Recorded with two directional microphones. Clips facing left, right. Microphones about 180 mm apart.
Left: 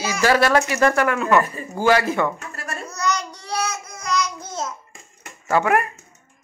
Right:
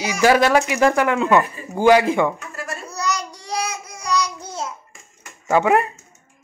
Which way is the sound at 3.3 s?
10° right (ahead or behind).